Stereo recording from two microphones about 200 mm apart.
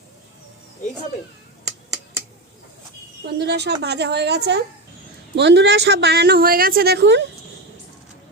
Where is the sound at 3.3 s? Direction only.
60° right (ahead or behind).